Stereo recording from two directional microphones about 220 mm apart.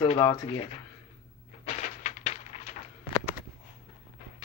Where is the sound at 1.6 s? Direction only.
35° left (ahead or behind).